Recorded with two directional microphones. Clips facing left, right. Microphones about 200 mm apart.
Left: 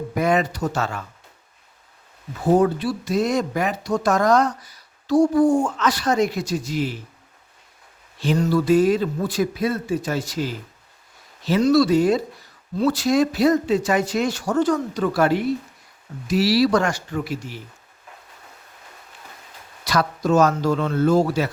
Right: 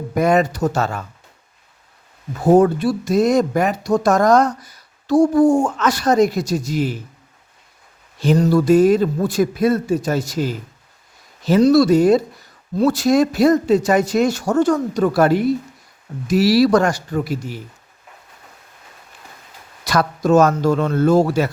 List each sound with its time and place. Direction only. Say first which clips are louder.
0.1 s speech: right 5 dB; 45° right (ahead or behind)
2.4 s speech: right 5 dB; 50° right (ahead or behind)
8.2 s speech: right 5 dB; 40° right (ahead or behind)
19.8 s speech: right 3 dB; 50° right (ahead or behind)